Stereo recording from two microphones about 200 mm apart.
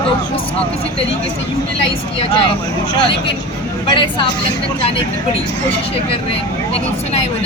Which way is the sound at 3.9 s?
25° left (ahead or behind).